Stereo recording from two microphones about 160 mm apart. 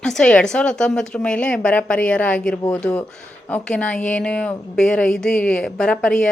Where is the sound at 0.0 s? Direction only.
5° left (ahead or behind).